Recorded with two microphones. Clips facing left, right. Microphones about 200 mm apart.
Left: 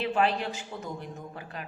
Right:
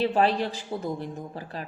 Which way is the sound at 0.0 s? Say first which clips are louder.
Right 4 dB; 35° right (ahead or behind).